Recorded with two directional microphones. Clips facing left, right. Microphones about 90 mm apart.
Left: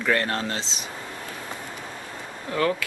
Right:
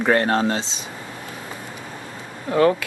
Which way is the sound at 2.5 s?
40° right (ahead or behind).